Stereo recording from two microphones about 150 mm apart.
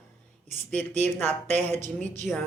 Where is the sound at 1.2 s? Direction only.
15° left (ahead or behind).